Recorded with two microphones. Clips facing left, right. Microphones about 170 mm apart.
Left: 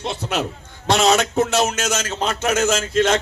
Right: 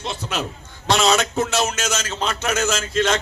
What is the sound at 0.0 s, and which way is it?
A man's voice, 60° left (ahead or behind).